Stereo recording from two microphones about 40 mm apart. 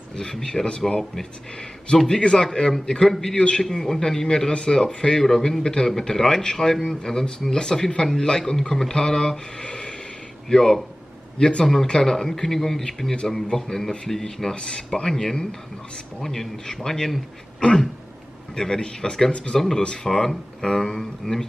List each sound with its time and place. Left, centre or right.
0.1 s a man's voice: centre
3.3 s a man's voice: left
17.6 s throat clearing: left
18.5 s a man's voice: centre